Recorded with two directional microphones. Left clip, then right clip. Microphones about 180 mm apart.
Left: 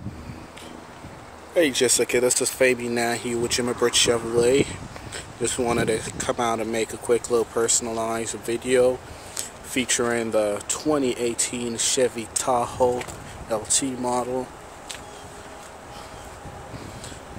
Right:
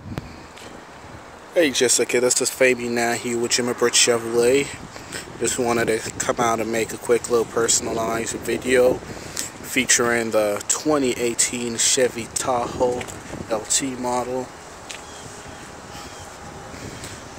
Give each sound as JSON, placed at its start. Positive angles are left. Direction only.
{"t": 1.5, "sound": "speech", "side_deg": -5}